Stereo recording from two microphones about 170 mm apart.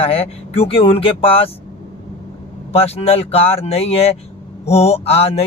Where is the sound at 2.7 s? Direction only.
35° left (ahead or behind).